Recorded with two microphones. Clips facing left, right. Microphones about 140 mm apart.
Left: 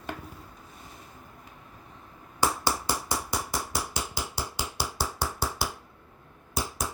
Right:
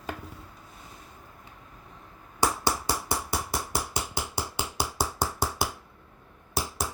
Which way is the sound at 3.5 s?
55° right (ahead or behind).